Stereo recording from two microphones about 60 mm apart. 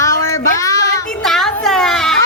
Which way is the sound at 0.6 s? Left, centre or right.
Left.